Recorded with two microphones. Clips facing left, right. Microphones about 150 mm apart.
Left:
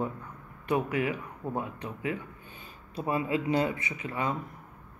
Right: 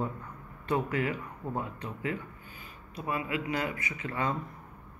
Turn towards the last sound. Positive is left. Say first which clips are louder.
# even
turn(degrees=15)  # may be behind; listen again after turning